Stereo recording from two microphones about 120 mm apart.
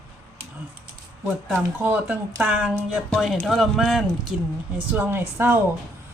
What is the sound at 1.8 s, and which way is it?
A woman's voice, 15° right (ahead or behind).